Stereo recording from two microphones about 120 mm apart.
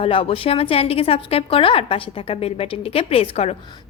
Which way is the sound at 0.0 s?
50° left (ahead or behind).